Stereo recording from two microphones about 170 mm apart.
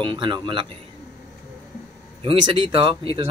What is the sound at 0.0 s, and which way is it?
Speech, 30° right (ahead or behind).